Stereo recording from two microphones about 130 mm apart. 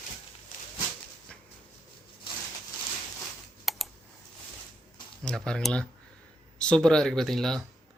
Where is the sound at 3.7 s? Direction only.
Centre (ahead or behind).